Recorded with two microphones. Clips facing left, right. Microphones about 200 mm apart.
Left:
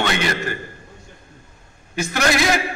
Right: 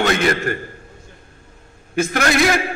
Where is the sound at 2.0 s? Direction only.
55° right (ahead or behind).